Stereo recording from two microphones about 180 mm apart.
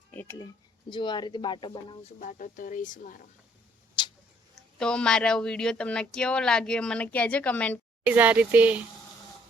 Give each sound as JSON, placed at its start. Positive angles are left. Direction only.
{"t": 0.1, "sound": "speech", "side_deg": 10}
{"t": 0.9, "sound": "speech", "side_deg": 25}
{"t": 2.2, "sound": "speech", "side_deg": 50}
{"t": 4.0, "sound": "tick-tock", "side_deg": 25}
{"t": 4.5, "sound": "speech", "side_deg": 5}
{"t": 8.0, "sound": "speech", "side_deg": -10}